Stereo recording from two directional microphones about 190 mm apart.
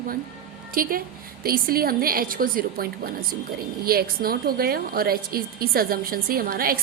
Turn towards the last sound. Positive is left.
turn(degrees=-50)  # may be behind; listen again after turning